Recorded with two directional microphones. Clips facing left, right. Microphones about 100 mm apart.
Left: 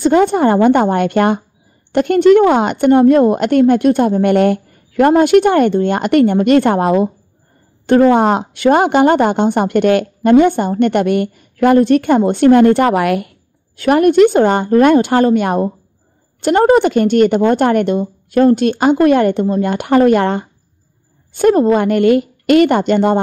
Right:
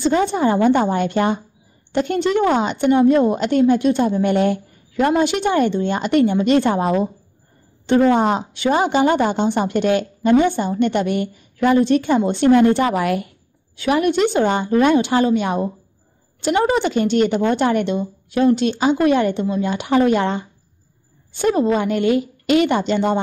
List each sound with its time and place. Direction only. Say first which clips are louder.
0.0 s a woman's voice: left 6 dB; 55° left (ahead or behind)
13.7 s speech: left 8 dB; 50° left (ahead or behind)